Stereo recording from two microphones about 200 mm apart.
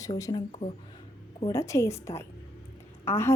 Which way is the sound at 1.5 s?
15° left (ahead or behind).